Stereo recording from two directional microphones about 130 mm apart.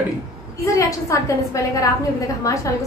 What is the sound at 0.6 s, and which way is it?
A woman's voice, 25° left (ahead or behind).